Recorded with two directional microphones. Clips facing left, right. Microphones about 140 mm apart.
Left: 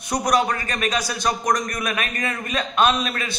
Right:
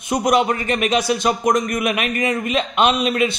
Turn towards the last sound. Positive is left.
turn(degrees=-20)  # may be behind; listen again after turning